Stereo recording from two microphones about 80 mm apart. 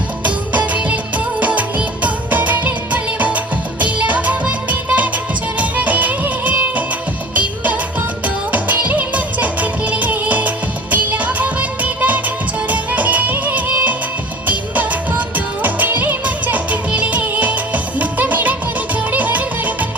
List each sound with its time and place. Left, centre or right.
0.5 s music of bollywood: centre
7.3 s music: centre